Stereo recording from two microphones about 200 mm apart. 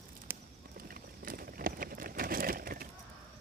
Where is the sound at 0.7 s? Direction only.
45° right (ahead or behind).